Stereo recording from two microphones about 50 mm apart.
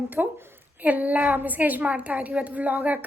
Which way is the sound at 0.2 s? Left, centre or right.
Right.